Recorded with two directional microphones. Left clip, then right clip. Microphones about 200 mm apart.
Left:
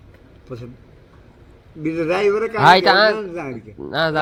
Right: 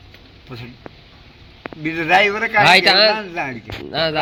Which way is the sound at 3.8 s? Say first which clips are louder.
Even; 25° left (ahead or behind).